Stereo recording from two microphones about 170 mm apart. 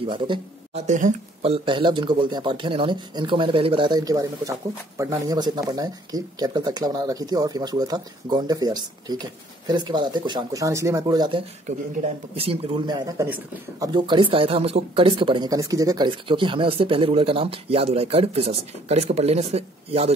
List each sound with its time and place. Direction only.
0.0 s speech: 30° right (ahead or behind)
0.8 s speech: 50° right (ahead or behind)
1.4 s speech: 30° right (ahead or behind)
11.6 s speech: 40° right (ahead or behind)